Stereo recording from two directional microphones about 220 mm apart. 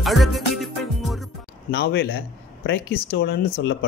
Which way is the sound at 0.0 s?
Centre (ahead or behind).